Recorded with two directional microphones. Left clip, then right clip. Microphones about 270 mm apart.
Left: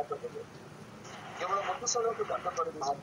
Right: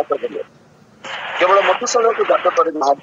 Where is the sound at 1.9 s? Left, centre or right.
Right.